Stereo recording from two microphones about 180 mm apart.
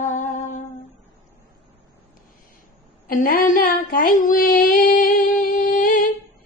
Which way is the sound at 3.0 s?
50° left (ahead or behind).